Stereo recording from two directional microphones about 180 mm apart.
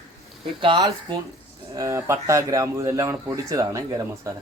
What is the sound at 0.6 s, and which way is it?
Speech, 25° right (ahead or behind).